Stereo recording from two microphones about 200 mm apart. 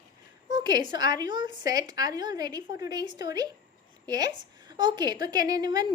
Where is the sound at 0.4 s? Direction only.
20° right (ahead or behind).